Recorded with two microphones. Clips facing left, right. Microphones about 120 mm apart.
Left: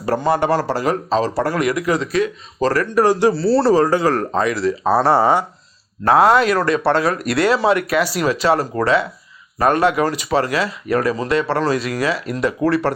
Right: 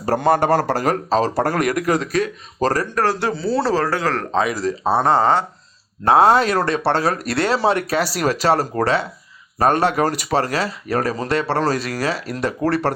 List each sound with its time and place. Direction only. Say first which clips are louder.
0.2 s a man's voice: right 3 dB; 50° right (ahead or behind)
2.9 s speech: left 6 dB; 15° left (ahead or behind)
4.6 s speech: left 3 dB; 35° right (ahead or behind)
4.9 s speech: left 1 dB; 10° left (ahead or behind)
6.1 s speech: left 1 dB; 25° right (ahead or behind)